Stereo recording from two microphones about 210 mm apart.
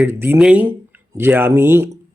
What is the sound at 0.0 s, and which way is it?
A man's voice, 10° right (ahead or behind).